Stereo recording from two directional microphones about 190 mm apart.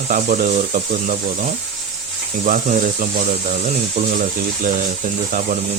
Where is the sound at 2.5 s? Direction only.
40° right (ahead or behind).